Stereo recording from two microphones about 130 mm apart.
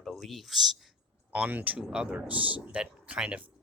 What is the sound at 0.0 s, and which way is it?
Speech, centre (ahead or behind).